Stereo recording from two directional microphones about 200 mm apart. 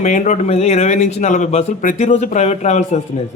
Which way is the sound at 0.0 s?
40° left (ahead or behind).